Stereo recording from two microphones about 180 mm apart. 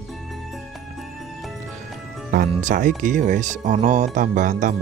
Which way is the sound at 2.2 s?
50° right (ahead or behind).